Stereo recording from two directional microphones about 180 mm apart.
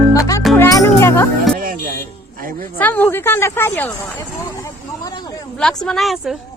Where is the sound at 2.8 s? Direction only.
10° left (ahead or behind).